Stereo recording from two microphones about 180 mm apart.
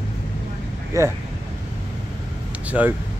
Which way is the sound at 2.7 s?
10° right (ahead or behind).